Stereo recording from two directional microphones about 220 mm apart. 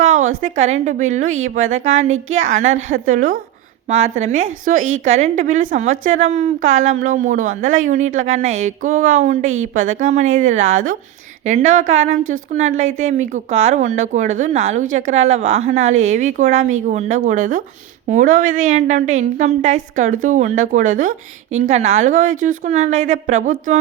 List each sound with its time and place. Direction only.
0.0 s a woman's voice: 35° right (ahead or behind)